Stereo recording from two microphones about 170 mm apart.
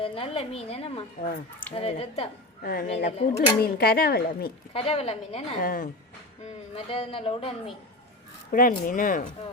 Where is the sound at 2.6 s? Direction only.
55° left (ahead or behind).